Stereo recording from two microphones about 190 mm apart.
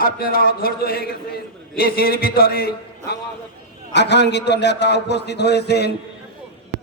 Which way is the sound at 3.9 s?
65° left (ahead or behind).